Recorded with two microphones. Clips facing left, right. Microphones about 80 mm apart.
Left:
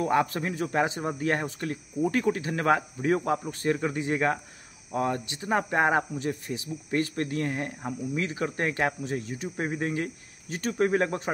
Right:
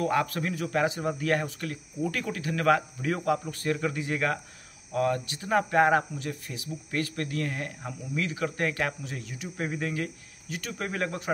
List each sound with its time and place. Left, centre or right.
0.0 s speech: left